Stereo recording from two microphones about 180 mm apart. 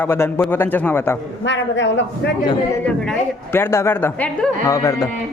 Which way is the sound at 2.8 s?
10° left (ahead or behind).